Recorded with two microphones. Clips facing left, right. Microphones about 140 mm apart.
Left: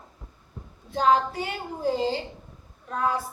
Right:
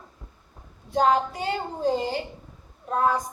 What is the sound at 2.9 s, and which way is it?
Speech, 40° right (ahead or behind).